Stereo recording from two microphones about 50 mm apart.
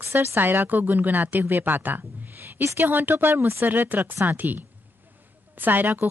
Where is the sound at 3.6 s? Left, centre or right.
Right.